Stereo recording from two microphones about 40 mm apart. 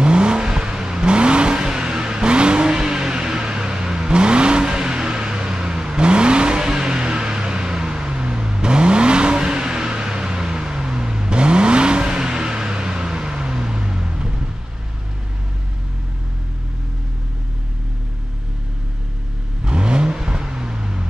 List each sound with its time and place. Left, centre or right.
0.0 s vehicle: right
19.6 s vehicle: right